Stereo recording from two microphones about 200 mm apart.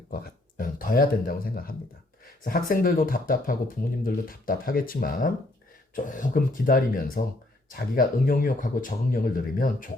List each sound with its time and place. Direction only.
0.1 s speech: 45° left (ahead or behind)